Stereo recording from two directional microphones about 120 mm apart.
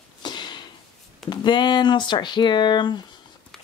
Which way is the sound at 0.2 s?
40° left (ahead or behind).